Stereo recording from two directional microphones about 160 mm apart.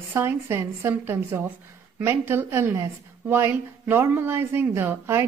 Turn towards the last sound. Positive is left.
turn(degrees=-15)  # may be behind; listen again after turning